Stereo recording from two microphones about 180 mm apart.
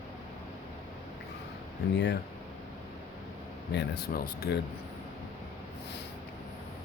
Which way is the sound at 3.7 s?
65° left (ahead or behind).